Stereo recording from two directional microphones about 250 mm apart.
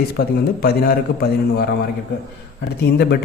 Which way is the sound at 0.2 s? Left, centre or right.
Left.